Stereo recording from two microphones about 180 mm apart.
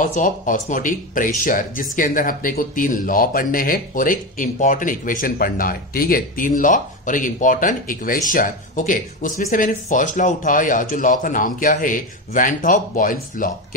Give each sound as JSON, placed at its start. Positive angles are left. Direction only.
{"t": 0.0, "sound": "speech", "side_deg": 45}